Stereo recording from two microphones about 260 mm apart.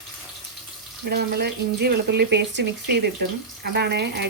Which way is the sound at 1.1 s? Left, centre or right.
Right.